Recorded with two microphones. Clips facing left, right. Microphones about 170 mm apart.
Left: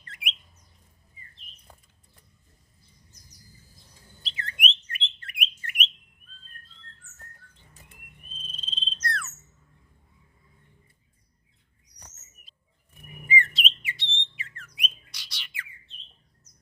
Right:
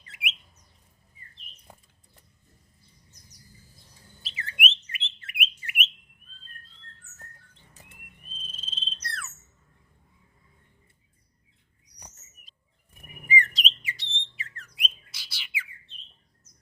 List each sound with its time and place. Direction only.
0.0 s bird: 5° right (ahead or behind)
4.2 s bird: 5° right (ahead or behind)
8.4 s cricket: 5° right (ahead or behind)
13.2 s squawk: 40° right (ahead or behind)
15.1 s bird: 5° right (ahead or behind)